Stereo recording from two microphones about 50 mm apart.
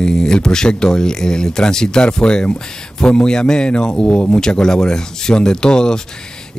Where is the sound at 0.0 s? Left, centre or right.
Centre.